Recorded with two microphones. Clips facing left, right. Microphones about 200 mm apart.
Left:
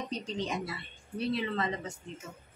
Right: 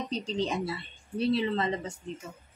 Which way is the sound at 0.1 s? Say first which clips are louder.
Right 6 dB; 30° right (ahead or behind).